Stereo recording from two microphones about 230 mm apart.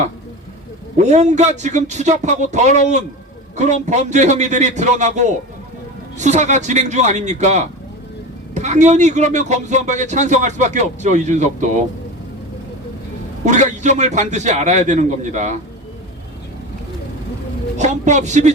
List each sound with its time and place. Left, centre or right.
0.9 s a man's voice: right
13.4 s a man's voice: right
17.7 s a man's voice: right